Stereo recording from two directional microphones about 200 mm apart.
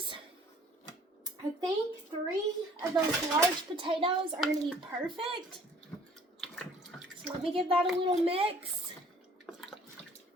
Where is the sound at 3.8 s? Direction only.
25° right (ahead or behind).